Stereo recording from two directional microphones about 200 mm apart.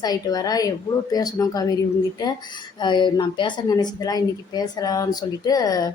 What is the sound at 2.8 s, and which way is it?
A woman's voice, 25° left (ahead or behind).